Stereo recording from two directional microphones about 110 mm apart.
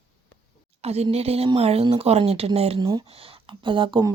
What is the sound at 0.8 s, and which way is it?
Speech, 75° right (ahead or behind).